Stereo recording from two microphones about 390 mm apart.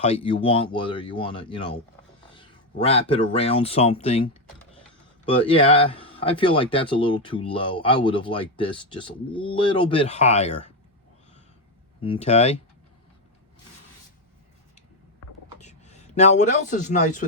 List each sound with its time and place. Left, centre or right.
0.0 s speech: centre
5.5 s speech: centre
12.0 s speech: centre
15.5 s speech: centre